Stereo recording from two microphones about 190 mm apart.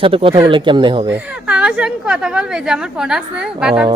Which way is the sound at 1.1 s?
5° right (ahead or behind).